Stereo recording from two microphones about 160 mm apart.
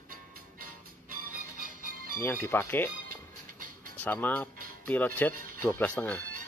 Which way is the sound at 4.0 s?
10° left (ahead or behind).